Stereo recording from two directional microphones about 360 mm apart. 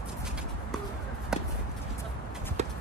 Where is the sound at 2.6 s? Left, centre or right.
Centre.